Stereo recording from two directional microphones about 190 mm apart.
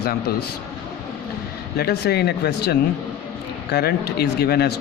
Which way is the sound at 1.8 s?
55° left (ahead or behind).